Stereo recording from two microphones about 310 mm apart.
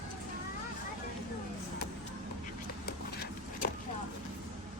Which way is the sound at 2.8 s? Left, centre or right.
Left.